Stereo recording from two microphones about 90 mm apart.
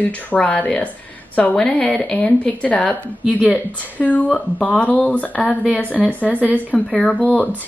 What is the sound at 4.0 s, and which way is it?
Speech, 15° left (ahead or behind).